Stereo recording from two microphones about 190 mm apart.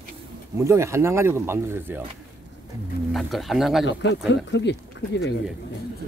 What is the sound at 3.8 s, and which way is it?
Speech, 70° left (ahead or behind).